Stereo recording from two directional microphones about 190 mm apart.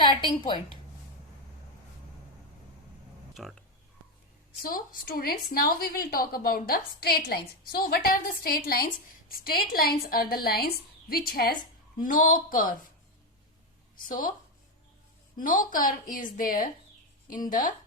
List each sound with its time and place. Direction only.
0.0 s a woman's voice: 20° left (ahead or behind)
3.4 s speech: centre (ahead or behind)
4.6 s a woman's voice: 50° left (ahead or behind)
14.1 s a woman's voice: 45° left (ahead or behind)
15.4 s a woman's voice: 45° left (ahead or behind)